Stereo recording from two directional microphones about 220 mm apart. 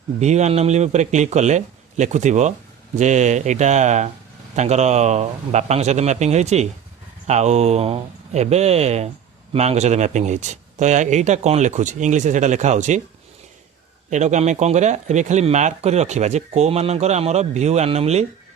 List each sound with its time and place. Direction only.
0.2 s speech: 30° right (ahead or behind)
14.1 s speech: 35° right (ahead or behind)